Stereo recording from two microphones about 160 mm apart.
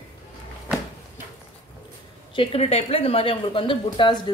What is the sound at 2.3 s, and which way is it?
A woman's voice, 40° left (ahead or behind).